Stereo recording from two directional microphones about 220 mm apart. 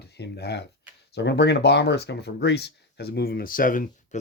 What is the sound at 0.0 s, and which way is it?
Speech, 50° left (ahead or behind).